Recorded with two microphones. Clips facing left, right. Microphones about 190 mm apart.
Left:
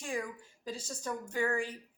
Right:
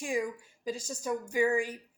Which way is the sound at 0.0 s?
10° right (ahead or behind).